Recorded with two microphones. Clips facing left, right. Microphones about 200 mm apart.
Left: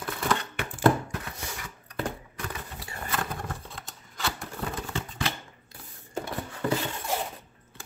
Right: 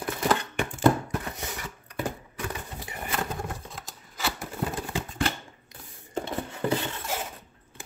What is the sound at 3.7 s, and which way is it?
Shuffling cards, centre (ahead or behind).